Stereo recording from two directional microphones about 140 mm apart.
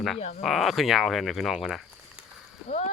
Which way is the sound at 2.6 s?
60° left (ahead or behind).